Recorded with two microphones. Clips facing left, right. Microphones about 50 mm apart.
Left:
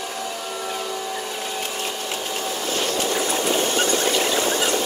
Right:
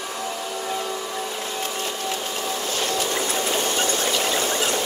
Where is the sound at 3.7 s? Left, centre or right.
Left.